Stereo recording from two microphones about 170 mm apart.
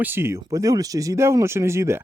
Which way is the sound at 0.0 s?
15° right (ahead or behind).